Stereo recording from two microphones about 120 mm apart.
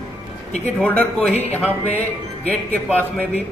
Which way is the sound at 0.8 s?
15° left (ahead or behind).